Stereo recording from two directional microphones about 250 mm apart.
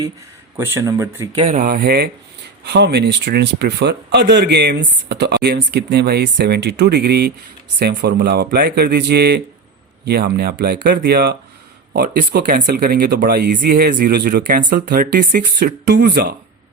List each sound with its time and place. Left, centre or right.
0.5 s speech: centre
1.4 s speech: right